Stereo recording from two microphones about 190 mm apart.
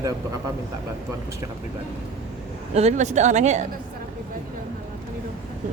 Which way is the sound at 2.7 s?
35° right (ahead or behind).